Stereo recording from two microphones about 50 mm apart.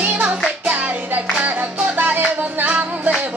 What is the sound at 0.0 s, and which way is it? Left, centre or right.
Music, right.